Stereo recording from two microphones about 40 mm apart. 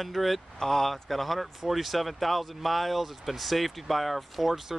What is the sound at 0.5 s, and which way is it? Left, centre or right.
Speech, centre.